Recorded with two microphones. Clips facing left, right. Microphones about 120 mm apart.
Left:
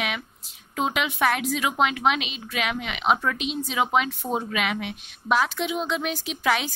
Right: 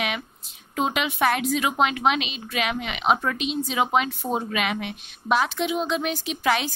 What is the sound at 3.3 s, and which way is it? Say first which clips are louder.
Speech: right 2 dB; 65° left (ahead or behind).